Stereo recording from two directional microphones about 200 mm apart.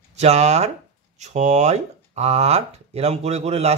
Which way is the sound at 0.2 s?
35° right (ahead or behind).